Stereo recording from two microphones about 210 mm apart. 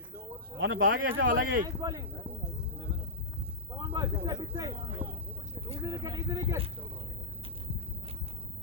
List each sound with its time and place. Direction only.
0.6 s speech: 65° right (ahead or behind)
1.6 s speech: 20° right (ahead or behind)
3.8 s speech: 20° right (ahead or behind)